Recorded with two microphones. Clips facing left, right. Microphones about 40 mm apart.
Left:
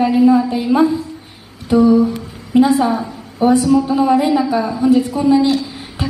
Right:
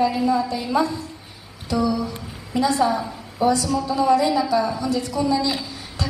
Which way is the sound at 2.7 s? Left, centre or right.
Left.